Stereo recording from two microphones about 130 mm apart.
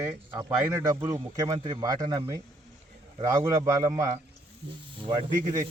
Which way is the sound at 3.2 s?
25° right (ahead or behind).